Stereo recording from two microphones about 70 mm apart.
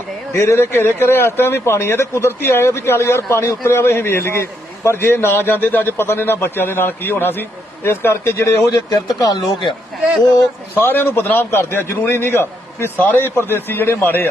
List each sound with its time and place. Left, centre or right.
0.3 s a man's voice: left
8.7 s speech: left
10.8 s a man's voice: left